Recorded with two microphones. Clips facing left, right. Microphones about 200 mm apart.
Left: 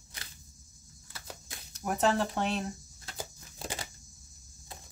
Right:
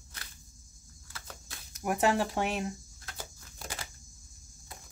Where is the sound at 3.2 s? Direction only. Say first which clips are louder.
Left 5 dB; 20° left (ahead or behind).